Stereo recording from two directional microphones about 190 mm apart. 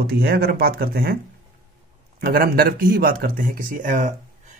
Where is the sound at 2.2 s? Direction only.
50° right (ahead or behind).